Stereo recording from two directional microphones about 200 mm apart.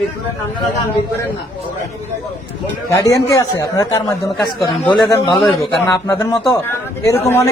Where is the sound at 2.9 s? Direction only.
15° left (ahead or behind).